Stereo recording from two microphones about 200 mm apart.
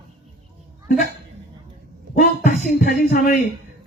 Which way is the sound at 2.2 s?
45° left (ahead or behind).